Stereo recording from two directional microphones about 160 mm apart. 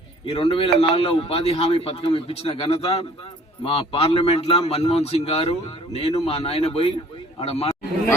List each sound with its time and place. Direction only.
0.3 s a man's voice: 35° left (ahead or behind)